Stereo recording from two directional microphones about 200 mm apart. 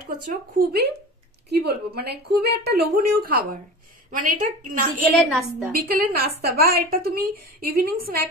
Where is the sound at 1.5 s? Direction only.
55° right (ahead or behind).